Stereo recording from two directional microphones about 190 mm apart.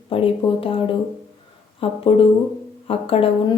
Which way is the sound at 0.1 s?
30° left (ahead or behind).